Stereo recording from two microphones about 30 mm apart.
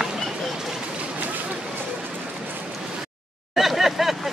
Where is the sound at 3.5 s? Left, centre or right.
Centre.